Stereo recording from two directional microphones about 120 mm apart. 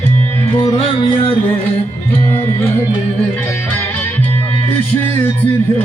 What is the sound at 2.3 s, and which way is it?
Music, 20° left (ahead or behind).